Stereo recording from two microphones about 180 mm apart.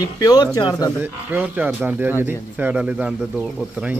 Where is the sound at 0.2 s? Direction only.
20° left (ahead or behind).